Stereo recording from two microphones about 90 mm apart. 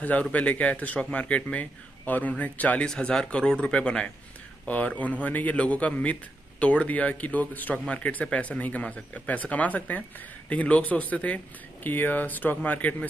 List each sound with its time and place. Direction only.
0.0 s speech: 15° left (ahead or behind)